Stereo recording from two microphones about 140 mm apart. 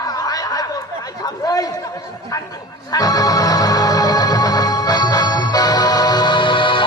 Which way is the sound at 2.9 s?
25° left (ahead or behind).